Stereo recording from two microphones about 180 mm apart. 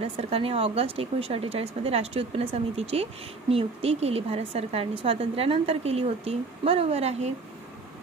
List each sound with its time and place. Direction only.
0.0 s speech: 35° right (ahead or behind)